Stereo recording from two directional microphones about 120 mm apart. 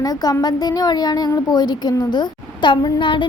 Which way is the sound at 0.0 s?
30° left (ahead or behind).